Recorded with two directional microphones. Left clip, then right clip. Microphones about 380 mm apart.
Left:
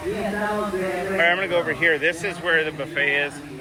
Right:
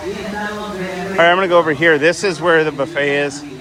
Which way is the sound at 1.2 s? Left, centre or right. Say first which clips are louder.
Right 9 dB; right.